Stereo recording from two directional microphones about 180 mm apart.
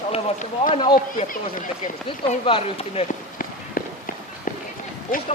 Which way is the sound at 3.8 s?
55° left (ahead or behind).